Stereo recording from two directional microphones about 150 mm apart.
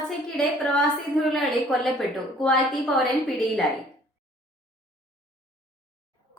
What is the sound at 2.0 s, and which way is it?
Speech, 5° left (ahead or behind).